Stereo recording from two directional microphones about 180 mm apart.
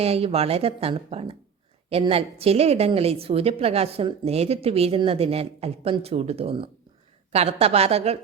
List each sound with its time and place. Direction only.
0.0 s a woman's voice: 35° right (ahead or behind)